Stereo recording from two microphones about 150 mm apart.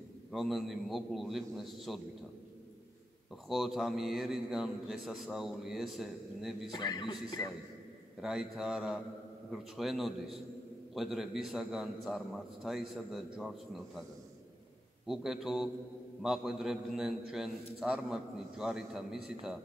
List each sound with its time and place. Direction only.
0.3 s a man's voice: centre (ahead or behind)
3.4 s a man's voice: centre (ahead or behind)
6.7 s a man's voice: 30° left (ahead or behind)
8.2 s a man's voice: 5° right (ahead or behind)
15.0 s a man's voice: centre (ahead or behind)